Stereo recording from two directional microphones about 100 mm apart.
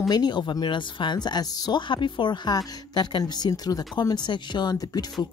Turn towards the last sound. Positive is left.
turn(degrees=40)  # may be behind; listen again after turning